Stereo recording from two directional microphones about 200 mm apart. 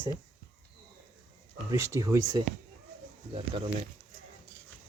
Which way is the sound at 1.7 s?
15° right (ahead or behind).